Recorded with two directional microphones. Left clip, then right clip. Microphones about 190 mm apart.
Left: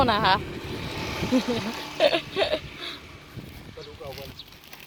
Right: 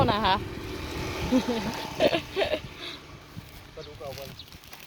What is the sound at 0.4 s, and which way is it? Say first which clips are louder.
Vehicle: left 2 dB; 60° right (ahead or behind).